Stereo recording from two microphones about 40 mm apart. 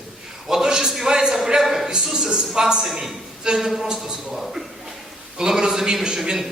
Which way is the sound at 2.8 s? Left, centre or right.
Centre.